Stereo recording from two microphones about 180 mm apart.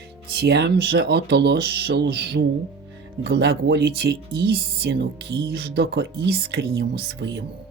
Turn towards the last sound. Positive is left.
turn(degrees=-65)  # may be behind; listen again after turning